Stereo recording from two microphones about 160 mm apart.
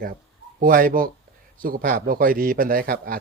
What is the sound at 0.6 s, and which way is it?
A man's voice, 60° right (ahead or behind).